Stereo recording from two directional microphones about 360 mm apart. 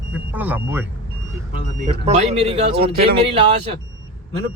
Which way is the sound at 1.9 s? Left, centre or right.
Centre.